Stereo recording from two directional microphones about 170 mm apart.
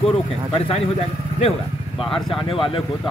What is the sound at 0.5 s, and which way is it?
Speech, 30° left (ahead or behind).